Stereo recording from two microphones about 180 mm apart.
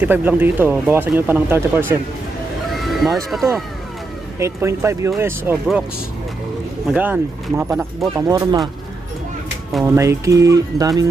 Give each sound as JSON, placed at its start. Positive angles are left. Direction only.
{"t": 0.0, "sound": "speech", "side_deg": -10}
{"t": 2.7, "sound": "a sound", "side_deg": 0}
{"t": 3.2, "sound": "speech", "side_deg": 0}
{"t": 4.4, "sound": "speech", "side_deg": -15}
{"t": 6.8, "sound": "speech", "side_deg": -10}
{"t": 9.9, "sound": "speech", "side_deg": -15}